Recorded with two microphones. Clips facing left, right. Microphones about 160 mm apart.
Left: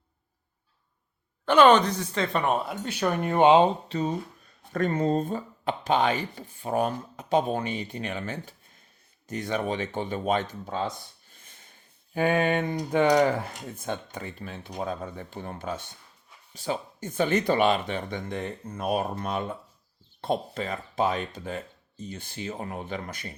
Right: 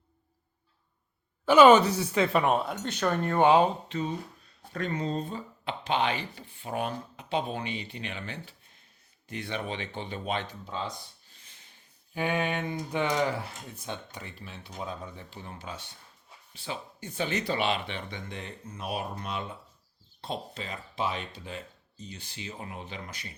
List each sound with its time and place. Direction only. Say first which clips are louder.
1.5 s speech: right 1 dB; 5° right (ahead or behind); by 3.7 s 20° left (ahead or behind)
3.8 s speech: left 4 dB; 40° left (ahead or behind)
11.3 s a sound: left 4 dB; 50° left (ahead or behind)
12.1 s speech: left 6 dB; 45° left (ahead or behind)